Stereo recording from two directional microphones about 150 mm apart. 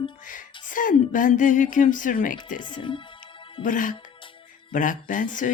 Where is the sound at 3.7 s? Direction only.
65° left (ahead or behind).